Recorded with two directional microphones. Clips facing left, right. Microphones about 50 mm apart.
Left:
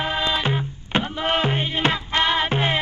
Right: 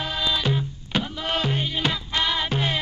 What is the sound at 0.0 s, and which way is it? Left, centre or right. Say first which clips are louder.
Music: left 3 dB; left.